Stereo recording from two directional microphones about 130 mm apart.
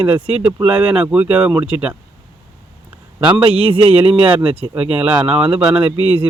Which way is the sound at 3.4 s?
45° right (ahead or behind).